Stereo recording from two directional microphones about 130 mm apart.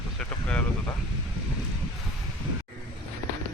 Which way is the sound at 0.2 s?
5° left (ahead or behind).